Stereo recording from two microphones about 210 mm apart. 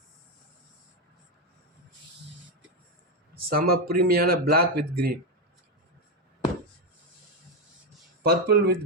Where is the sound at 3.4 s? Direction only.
45° right (ahead or behind).